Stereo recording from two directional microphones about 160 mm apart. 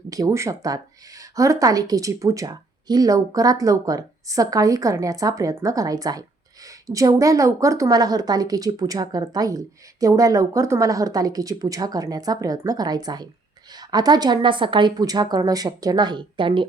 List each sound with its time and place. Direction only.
0.1 s a woman's voice: 20° right (ahead or behind)